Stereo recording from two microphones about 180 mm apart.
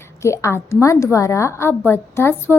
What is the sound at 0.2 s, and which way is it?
A woman's voice, 15° left (ahead or behind).